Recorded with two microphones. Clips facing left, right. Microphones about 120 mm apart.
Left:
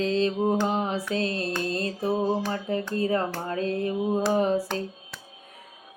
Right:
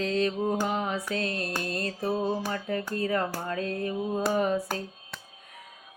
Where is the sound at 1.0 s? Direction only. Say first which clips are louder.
Left 3 dB; 25° left (ahead or behind).